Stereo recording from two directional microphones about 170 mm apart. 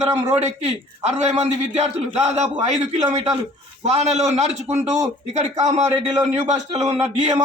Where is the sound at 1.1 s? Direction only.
40° right (ahead or behind).